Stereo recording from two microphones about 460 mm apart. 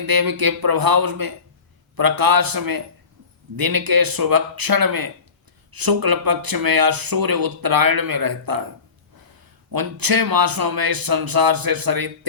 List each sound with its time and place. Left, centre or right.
0.0 s speech: right
9.7 s speech: right